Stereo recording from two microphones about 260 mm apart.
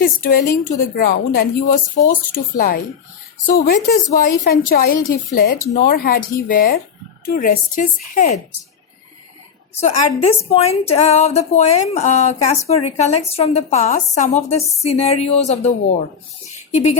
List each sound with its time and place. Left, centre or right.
0.0 s a woman's voice: left
3.8 s a woman's voice: left
9.7 s a woman's voice: left
16.5 s a sound: left